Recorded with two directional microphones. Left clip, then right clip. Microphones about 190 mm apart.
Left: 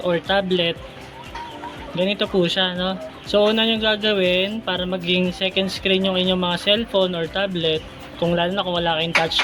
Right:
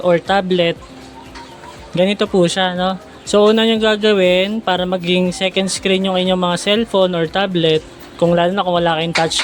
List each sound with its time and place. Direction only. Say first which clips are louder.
0.0 s speech: right 6 dB; 35° right (ahead or behind)
2.0 s speech: right 6 dB; 40° right (ahead or behind)